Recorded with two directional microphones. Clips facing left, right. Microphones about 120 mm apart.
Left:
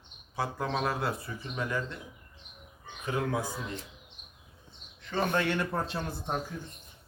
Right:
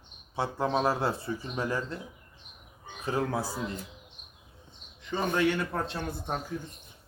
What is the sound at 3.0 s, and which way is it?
Speech, 35° right (ahead or behind).